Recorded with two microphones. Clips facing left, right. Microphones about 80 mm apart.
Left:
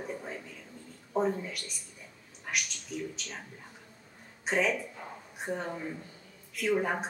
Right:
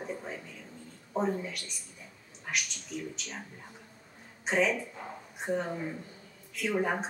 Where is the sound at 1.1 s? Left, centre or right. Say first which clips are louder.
Left 1 dB; centre.